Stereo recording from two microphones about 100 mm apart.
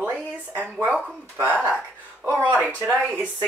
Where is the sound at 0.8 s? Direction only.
15° right (ahead or behind).